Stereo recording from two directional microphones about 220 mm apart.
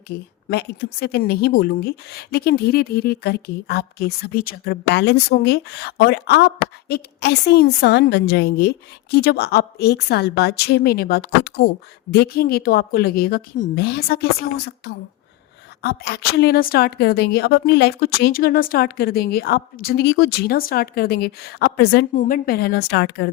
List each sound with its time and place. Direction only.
0.1 s a woman's voice: 45° left (ahead or behind)